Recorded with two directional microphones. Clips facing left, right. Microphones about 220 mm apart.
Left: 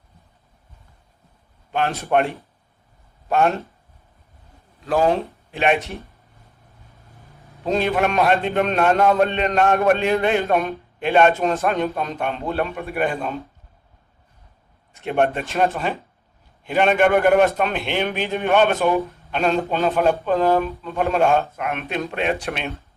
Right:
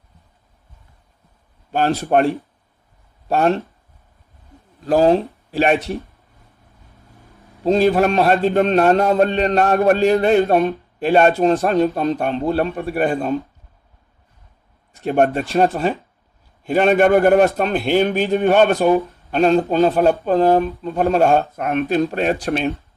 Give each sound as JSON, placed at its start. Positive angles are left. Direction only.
{"t": 1.7, "sound": "a man's voice", "side_deg": -30}
{"t": 4.9, "sound": "a man's voice", "side_deg": -35}
{"t": 7.6, "sound": "a man's voice", "side_deg": -30}
{"t": 15.0, "sound": "a man's voice", "side_deg": -35}